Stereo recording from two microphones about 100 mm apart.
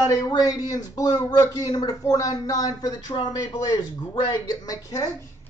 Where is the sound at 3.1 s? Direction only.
50° left (ahead or behind); by 5.3 s 30° left (ahead or behind).